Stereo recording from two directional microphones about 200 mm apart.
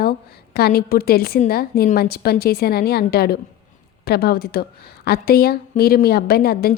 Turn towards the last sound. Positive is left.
turn(degrees=50)  # may be behind; listen again after turning